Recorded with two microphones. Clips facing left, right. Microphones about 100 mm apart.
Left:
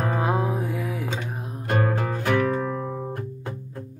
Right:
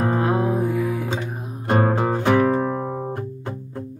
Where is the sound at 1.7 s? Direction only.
30° right (ahead or behind).